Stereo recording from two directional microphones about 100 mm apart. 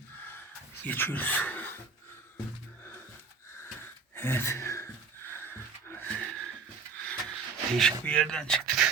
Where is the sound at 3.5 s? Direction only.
25° left (ahead or behind).